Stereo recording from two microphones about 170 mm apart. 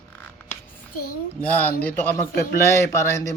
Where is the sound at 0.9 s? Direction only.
60° left (ahead or behind).